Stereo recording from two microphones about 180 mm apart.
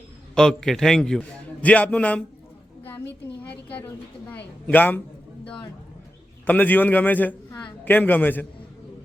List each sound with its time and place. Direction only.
0.3 s a man's voice: 5° left (ahead or behind)
3.5 s a man's voice: 10° left (ahead or behind)
6.4 s a man's voice: 10° left (ahead or behind)